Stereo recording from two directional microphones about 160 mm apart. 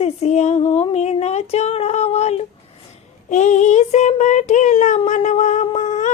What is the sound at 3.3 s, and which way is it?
Child singing, 50° left (ahead or behind).